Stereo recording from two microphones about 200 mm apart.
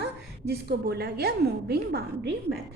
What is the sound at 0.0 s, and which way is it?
A woman's voice, 55° right (ahead or behind).